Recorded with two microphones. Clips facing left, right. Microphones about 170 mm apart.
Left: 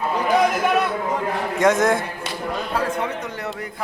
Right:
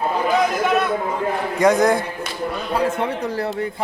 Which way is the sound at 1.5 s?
Centre (ahead or behind).